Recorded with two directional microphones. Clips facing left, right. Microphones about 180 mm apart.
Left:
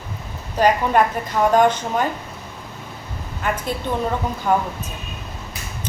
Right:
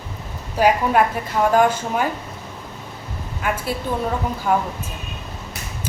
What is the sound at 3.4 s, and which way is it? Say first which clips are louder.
A woman's voice: even; 10° right (ahead or behind).